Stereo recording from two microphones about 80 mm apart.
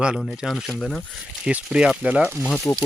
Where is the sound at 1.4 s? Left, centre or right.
Centre.